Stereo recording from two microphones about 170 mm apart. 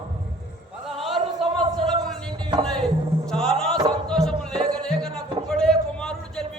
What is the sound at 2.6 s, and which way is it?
Music, 5° left (ahead or behind).